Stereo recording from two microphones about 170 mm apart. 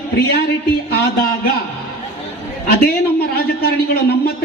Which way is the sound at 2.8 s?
65° left (ahead or behind).